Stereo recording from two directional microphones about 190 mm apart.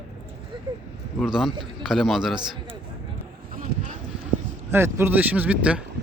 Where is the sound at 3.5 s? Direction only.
45° right (ahead or behind).